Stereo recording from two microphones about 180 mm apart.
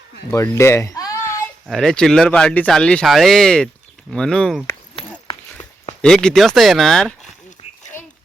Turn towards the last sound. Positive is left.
turn(degrees=0)  # may be behind; listen again after turning